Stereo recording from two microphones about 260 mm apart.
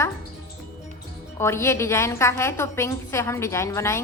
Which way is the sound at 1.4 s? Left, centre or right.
Centre.